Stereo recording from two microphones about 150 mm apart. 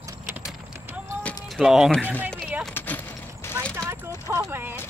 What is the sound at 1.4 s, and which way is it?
Speech, centre (ahead or behind).